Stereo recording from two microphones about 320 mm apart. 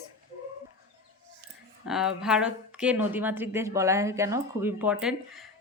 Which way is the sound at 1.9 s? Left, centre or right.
Centre.